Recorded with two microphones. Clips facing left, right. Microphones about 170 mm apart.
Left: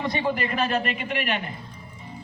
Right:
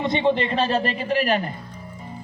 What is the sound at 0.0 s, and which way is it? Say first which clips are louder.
A woman's voice: right 5 dB; 25° right (ahead or behind).